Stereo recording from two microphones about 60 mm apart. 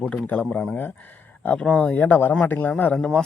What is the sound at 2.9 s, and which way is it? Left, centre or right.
Speech, centre.